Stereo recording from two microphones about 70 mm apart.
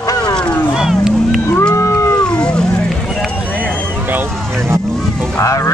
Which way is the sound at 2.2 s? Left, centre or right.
Centre.